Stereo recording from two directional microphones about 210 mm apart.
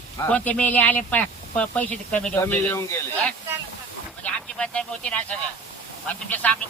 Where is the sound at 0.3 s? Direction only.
5° left (ahead or behind).